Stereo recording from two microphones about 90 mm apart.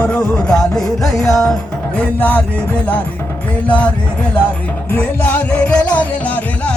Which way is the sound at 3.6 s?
15° left (ahead or behind).